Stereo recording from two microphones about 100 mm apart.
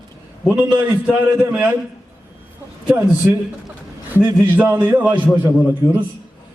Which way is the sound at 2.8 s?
20° right (ahead or behind).